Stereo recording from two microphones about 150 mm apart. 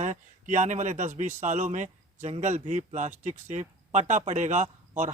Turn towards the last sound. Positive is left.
turn(degrees=-55)  # may be behind; listen again after turning